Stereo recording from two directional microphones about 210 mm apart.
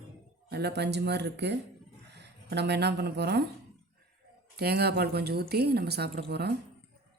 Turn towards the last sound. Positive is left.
turn(degrees=-50)  # may be behind; listen again after turning